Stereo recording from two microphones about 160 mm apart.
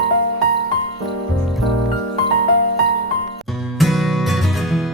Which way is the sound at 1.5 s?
Centre (ahead or behind).